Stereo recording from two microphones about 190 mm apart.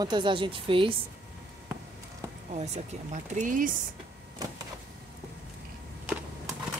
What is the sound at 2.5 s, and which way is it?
Speech, 35° right (ahead or behind).